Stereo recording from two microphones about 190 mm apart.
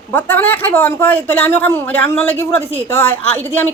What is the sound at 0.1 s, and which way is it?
A woman's voice, 10° left (ahead or behind).